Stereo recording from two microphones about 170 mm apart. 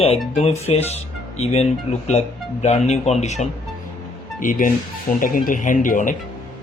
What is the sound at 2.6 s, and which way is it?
Speech, 40° left (ahead or behind).